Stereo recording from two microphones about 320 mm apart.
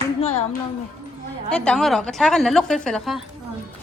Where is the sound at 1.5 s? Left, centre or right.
Centre.